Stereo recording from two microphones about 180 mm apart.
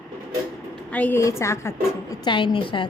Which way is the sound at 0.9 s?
10° left (ahead or behind).